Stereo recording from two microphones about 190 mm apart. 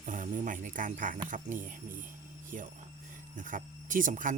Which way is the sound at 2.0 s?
45° right (ahead or behind).